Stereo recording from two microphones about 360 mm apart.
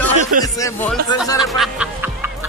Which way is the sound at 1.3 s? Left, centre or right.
Centre.